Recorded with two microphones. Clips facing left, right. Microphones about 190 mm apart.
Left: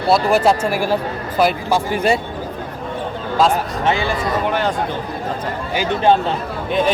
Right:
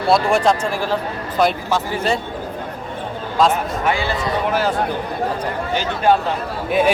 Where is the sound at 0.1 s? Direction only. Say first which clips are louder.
Left 1 dB; 5° left (ahead or behind).